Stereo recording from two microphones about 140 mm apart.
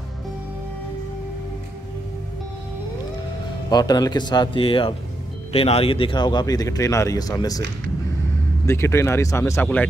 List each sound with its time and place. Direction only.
3.7 s speech: 30° left (ahead or behind)
8.6 s speech: 20° left (ahead or behind)